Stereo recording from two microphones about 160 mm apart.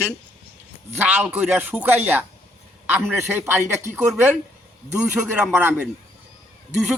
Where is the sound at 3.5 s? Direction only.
15° right (ahead or behind).